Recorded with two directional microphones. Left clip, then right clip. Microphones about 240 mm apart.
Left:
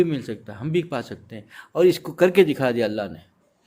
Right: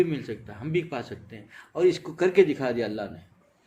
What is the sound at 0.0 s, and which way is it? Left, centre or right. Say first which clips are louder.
A man's voice: left 3 dB; left.